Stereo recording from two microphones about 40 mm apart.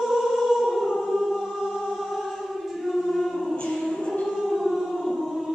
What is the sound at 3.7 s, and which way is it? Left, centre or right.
Music, centre.